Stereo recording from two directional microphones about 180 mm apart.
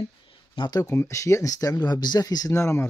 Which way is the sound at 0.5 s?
25° left (ahead or behind).